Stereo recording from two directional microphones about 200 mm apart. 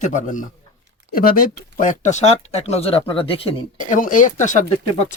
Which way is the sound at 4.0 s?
40° left (ahead or behind).